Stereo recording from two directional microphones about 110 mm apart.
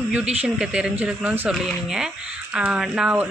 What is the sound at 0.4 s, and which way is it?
Speech, 10° right (ahead or behind).